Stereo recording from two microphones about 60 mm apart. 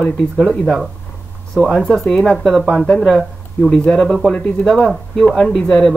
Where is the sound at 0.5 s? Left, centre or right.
Centre.